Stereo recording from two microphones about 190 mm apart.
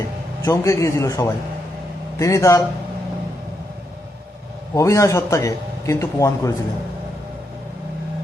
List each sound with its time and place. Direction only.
0.4 s a man's voice: 15° left (ahead or behind)
4.7 s a man's voice: 15° left (ahead or behind)